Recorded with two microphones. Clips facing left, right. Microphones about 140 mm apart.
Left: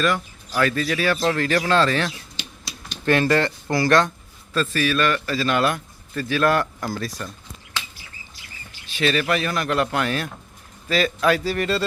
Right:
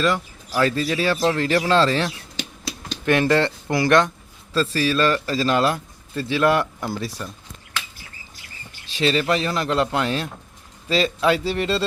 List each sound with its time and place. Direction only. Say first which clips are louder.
0.0 s speech: right 1 dB; 25° right (ahead or behind)
3.1 s speech: right 1 dB; 20° right (ahead or behind)
4.5 s speech: right 1 dB; 30° right (ahead or behind)
9.0 s speech: right 1 dB; 30° right (ahead or behind)